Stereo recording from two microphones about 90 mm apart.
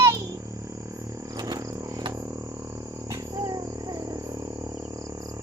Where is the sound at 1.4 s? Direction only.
45° right (ahead or behind).